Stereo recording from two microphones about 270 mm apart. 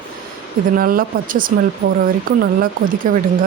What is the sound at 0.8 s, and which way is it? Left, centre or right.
Speech, right.